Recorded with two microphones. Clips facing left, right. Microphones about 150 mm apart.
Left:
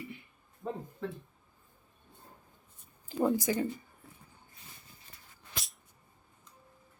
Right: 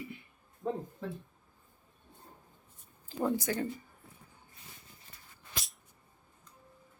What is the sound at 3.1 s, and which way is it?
Speech, 10° left (ahead or behind).